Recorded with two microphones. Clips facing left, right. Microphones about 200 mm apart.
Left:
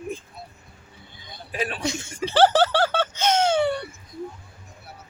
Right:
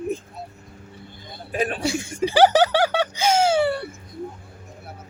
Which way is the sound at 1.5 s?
45° right (ahead or behind).